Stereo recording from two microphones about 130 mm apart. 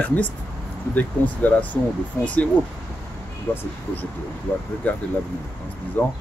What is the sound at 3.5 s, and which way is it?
Speech, 15° left (ahead or behind).